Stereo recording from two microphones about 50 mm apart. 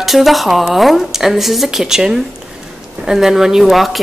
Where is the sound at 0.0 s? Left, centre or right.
Centre.